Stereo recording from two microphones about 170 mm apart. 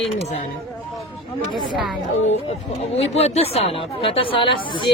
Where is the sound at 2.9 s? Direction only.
40° left (ahead or behind).